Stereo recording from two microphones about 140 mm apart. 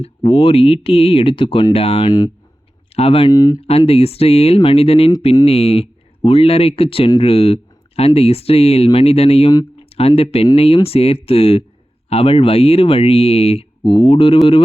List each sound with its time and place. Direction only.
0.0 s speech: 45° left (ahead or behind)
3.3 s speech: 25° left (ahead or behind)
3.6 s speech: 45° left (ahead or behind)